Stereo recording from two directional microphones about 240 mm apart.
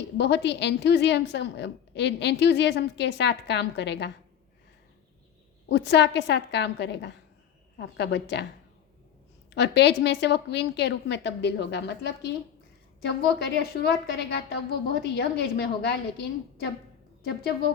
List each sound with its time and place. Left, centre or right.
0.2 s a woman's voice: left
5.6 s a woman's voice: left
9.5 s a woman's voice: left